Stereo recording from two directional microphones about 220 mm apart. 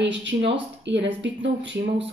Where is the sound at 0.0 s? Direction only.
55° right (ahead or behind).